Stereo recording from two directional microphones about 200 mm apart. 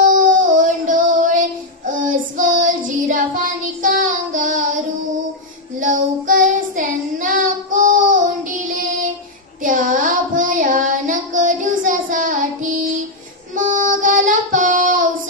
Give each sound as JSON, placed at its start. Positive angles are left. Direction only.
{"t": 0.1, "sound": "child singing", "side_deg": -40}